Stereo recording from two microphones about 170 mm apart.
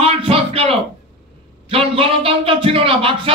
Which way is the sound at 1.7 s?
35° right (ahead or behind).